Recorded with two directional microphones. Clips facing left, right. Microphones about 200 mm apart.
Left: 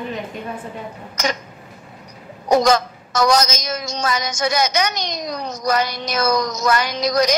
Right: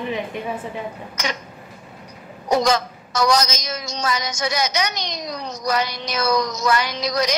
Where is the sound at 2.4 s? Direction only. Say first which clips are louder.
Left 3 dB; 45° left (ahead or behind).